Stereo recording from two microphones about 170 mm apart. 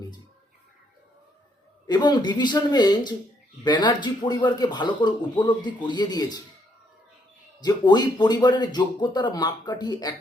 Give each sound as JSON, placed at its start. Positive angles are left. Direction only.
{"t": 1.9, "sound": "speech", "side_deg": 25}
{"t": 7.6, "sound": "speech", "side_deg": 25}